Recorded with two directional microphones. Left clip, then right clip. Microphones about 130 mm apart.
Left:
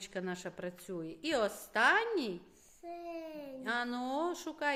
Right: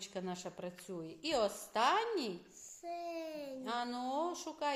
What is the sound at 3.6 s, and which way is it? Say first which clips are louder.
Speech: left 4 dB; 30° left (ahead or behind).